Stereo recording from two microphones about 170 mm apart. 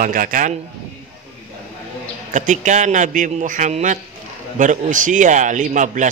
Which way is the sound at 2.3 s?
45° right (ahead or behind).